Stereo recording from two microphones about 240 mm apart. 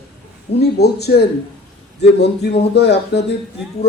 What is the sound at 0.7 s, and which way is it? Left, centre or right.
Speech, left.